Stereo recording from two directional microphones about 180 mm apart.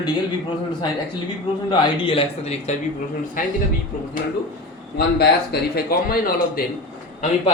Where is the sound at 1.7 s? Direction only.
25° left (ahead or behind).